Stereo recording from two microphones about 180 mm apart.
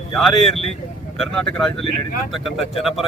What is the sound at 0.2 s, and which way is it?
Speech, centre (ahead or behind).